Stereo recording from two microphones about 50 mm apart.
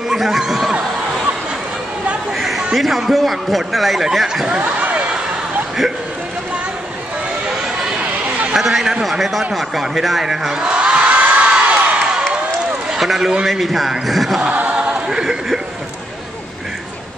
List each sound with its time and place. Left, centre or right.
0.1 s speech: centre
2.3 s a man's voice: centre
8.0 s a sound: right
8.5 s a man's voice: centre
9.2 s a sound: centre; by 12.0 s right
12.9 s a man's voice: centre
14.5 s choir: right
15.0 s speech: centre